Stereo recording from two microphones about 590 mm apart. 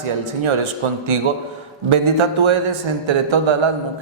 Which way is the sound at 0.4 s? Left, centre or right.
Right.